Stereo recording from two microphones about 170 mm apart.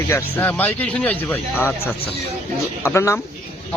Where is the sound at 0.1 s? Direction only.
10° left (ahead or behind).